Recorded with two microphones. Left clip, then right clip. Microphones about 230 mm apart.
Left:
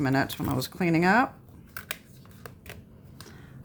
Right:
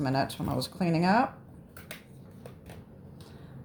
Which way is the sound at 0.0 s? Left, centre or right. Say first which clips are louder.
Left 3 dB; left.